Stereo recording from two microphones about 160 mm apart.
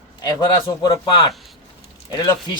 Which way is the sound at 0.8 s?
30° left (ahead or behind).